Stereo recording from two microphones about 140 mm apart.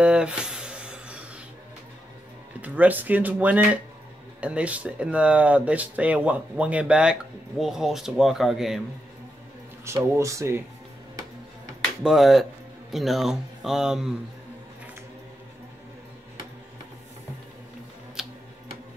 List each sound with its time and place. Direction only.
0.0 s a sound: 5° right (ahead or behind)
2.6 s speech: 10° right (ahead or behind)
10.1 s speech: 20° right (ahead or behind)
12.0 s speech: centre (ahead or behind)
18.2 s tick-tock: 5° right (ahead or behind)